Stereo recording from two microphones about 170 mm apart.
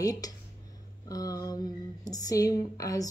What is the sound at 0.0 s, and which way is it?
Speech, 20° left (ahead or behind).